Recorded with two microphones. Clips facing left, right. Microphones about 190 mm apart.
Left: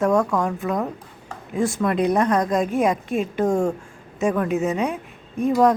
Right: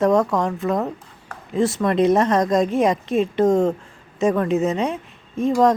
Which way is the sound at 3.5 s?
20° right (ahead or behind).